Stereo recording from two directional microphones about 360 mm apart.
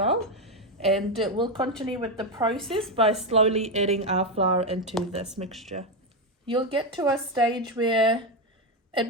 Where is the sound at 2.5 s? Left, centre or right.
Centre.